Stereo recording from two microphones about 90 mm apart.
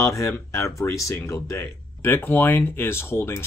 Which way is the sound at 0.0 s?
35° left (ahead or behind).